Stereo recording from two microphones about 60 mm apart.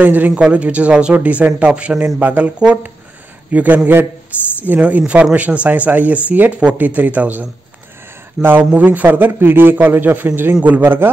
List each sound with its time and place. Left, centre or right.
0.0 s speech: right
0.3 s a man's voice: centre; by 11.1 s right